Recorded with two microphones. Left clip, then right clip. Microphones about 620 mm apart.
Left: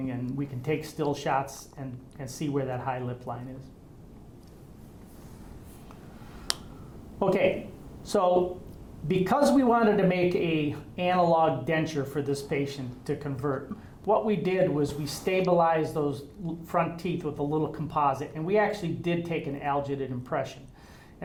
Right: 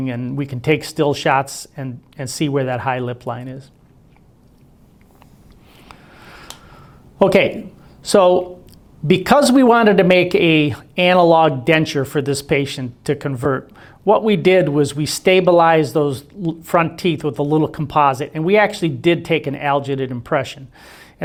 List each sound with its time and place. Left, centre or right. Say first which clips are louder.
0.1 s speech: right 9 dB; right
7.2 s a man's voice: right 11 dB; right